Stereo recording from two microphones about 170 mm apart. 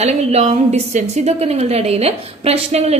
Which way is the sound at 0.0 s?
40° right (ahead or behind).